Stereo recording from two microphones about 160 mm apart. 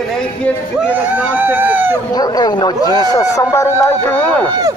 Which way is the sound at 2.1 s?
25° left (ahead or behind).